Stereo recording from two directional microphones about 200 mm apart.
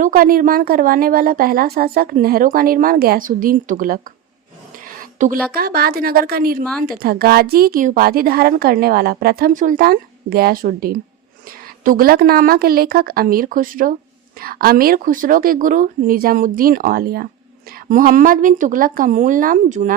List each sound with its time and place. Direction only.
0.0 s a woman's voice: 45° right (ahead or behind)
5.5 s a woman's voice: 50° right (ahead or behind)